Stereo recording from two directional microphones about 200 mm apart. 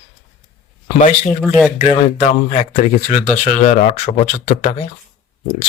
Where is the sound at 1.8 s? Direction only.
35° left (ahead or behind).